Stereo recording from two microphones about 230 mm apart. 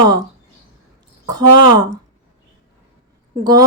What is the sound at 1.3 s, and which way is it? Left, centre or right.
Speech, centre.